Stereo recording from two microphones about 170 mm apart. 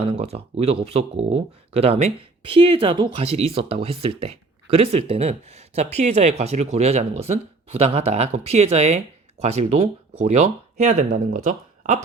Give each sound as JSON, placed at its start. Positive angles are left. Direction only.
{"t": 0.0, "sound": "speech", "side_deg": -35}